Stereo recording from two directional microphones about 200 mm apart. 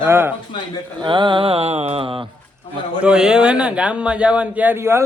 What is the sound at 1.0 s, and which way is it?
Mantra, 25° right (ahead or behind).